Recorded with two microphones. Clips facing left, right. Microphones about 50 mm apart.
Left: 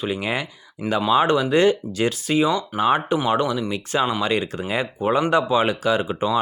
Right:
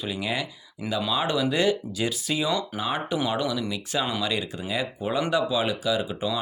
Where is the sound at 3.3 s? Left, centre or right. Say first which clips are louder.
Left 6 dB; left.